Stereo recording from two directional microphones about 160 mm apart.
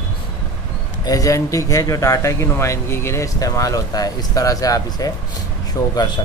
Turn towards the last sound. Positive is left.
turn(degrees=25)  # may be behind; listen again after turning